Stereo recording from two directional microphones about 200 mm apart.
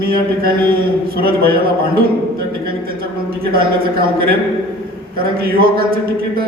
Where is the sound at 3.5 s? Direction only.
50° right (ahead or behind).